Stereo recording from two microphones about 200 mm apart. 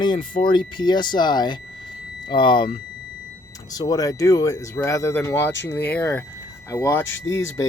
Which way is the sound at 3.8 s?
20° left (ahead or behind).